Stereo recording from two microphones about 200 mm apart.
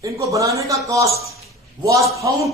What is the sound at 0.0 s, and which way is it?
Speech, 15° right (ahead or behind).